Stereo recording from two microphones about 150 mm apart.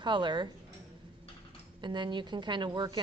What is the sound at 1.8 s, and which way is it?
A woman's voice, 30° right (ahead or behind).